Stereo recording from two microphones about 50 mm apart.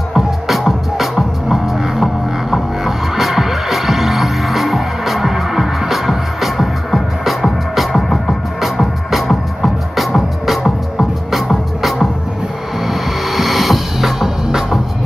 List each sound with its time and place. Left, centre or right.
0.1 s music: centre